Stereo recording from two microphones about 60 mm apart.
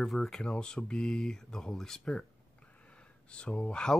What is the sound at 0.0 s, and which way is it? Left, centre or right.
Speech, centre.